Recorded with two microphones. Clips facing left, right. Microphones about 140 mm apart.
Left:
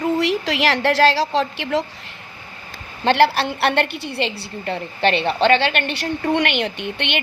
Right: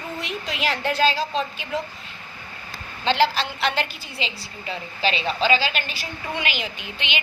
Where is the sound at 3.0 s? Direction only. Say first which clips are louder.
Left 5 dB; 65° left (ahead or behind).